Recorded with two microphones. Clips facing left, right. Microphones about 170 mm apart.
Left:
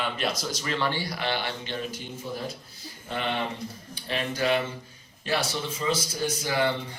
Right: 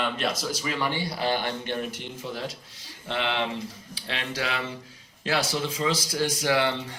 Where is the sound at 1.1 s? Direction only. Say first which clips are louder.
Right 3 dB; 35° right (ahead or behind).